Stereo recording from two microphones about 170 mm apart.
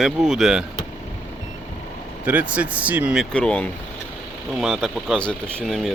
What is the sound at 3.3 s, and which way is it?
Speech, 5° left (ahead or behind).